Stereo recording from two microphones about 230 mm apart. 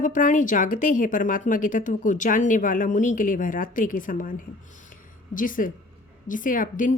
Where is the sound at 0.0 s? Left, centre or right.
Left.